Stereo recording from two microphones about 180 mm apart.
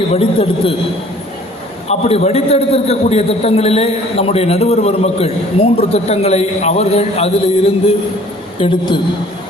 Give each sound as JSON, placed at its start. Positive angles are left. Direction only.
{"t": 0.1, "sound": "a man's voice", "side_deg": 30}
{"t": 1.9, "sound": "a man's voice", "side_deg": 35}